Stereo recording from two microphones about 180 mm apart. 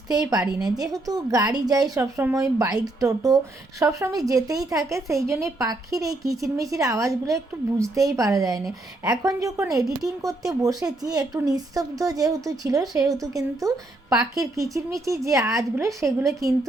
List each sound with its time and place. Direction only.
0.1 s a woman's voice: 20° right (ahead or behind)